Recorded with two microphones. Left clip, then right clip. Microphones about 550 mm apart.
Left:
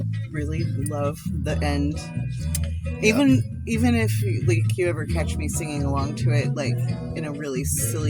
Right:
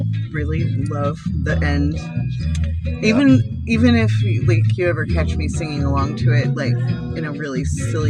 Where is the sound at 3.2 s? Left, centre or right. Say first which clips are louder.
Right 6 dB; left.